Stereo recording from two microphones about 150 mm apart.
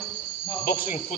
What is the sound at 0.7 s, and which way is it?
Speech, 75° left (ahead or behind).